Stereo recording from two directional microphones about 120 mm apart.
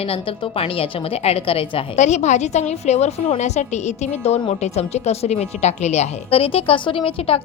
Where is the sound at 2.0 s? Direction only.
80° left.